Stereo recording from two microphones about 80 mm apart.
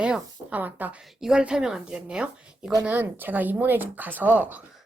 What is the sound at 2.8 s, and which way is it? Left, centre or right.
Speech, right.